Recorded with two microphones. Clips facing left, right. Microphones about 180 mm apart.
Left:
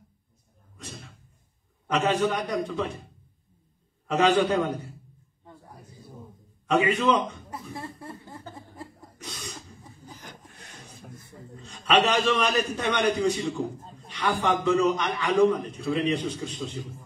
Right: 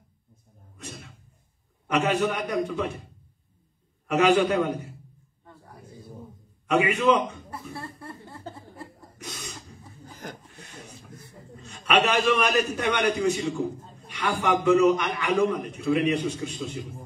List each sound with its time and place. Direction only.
1.9 s a man's voice: 10° right (ahead or behind)
4.1 s a man's voice: 10° right (ahead or behind)
5.4 s a sound: 15° left (ahead or behind)
6.7 s a man's voice: 10° right (ahead or behind)
7.7 s chuckle: 15° left (ahead or behind)
11.8 s a man's voice: 10° right (ahead or behind)